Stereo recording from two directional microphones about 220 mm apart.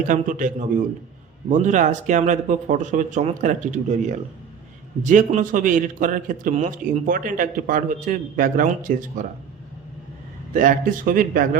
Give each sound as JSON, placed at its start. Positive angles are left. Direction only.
{"t": 0.1, "sound": "a man's voice", "side_deg": -35}
{"t": 10.5, "sound": "a man's voice", "side_deg": -40}